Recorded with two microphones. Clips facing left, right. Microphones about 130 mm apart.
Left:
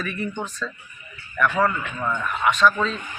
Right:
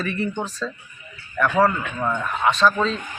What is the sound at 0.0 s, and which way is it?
Speech, 30° right (ahead or behind).